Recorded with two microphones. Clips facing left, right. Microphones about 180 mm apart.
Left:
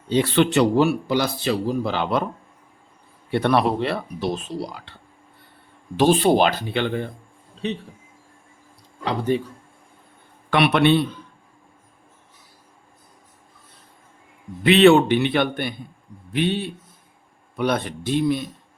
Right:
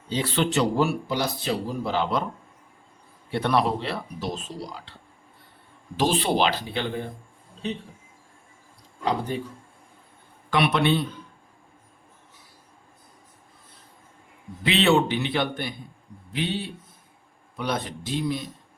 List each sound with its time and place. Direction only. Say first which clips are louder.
0.1 s a man's voice: left 6 dB; 60° left (ahead or behind)
3.3 s speech: left 4 dB; 60° left (ahead or behind)
6.0 s speech: left 6 dB; 50° left (ahead or behind)
10.5 s speech: left 5 dB; 65° left (ahead or behind)
14.6 s speech: left 7 dB; 60° left (ahead or behind)